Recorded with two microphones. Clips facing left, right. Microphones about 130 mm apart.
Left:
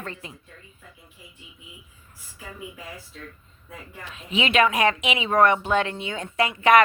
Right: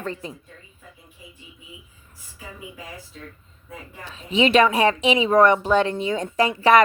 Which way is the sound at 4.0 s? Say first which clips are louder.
Right 6 dB; 35° right (ahead or behind).